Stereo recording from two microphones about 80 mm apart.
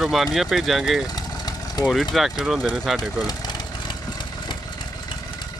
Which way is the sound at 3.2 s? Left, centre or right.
Left.